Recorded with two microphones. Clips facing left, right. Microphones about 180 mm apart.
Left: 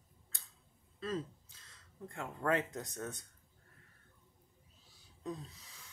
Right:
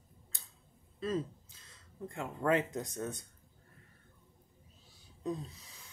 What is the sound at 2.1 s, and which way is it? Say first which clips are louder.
Speech: right 3 dB; 15° right (ahead or behind).